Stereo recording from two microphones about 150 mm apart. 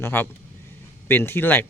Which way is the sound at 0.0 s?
15° left (ahead or behind).